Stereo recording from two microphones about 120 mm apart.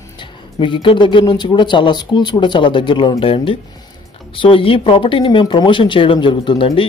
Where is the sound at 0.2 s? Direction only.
45° left (ahead or behind).